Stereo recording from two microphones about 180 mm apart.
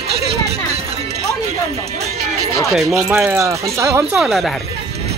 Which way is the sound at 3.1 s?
10° right (ahead or behind).